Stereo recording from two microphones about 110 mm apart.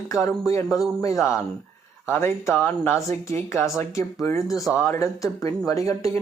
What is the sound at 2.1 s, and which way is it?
Speech, 20° left (ahead or behind).